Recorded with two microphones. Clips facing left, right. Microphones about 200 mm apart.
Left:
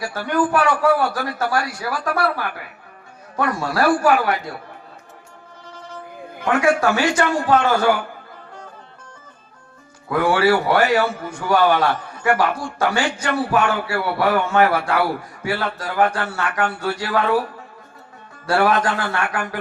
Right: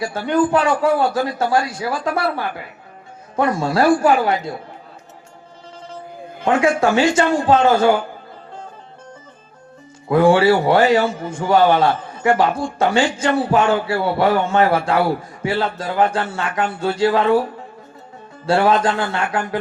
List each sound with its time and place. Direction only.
0.0 s a man's voice: 25° right (ahead or behind)
6.4 s a man's voice: 25° right (ahead or behind)
10.1 s a man's voice: 25° right (ahead or behind)
18.4 s a man's voice: 25° right (ahead or behind)